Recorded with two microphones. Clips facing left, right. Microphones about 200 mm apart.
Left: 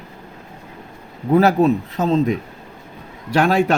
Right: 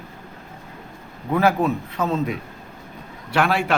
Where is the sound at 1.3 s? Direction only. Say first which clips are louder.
Left 5 dB; 30° left (ahead or behind).